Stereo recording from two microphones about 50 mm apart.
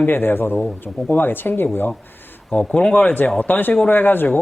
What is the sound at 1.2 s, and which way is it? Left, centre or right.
Speech, left.